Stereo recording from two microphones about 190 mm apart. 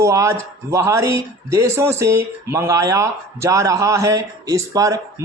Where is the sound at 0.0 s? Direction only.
15° right (ahead or behind).